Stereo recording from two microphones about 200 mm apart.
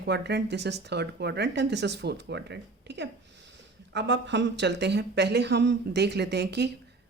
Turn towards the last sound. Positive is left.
turn(degrees=-55)  # may be behind; listen again after turning